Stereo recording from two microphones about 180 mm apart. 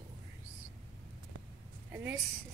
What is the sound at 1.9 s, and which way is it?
Speech, 10° right (ahead or behind).